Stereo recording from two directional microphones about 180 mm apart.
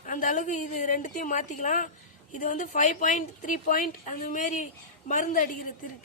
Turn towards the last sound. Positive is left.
turn(degrees=45)  # may be behind; listen again after turning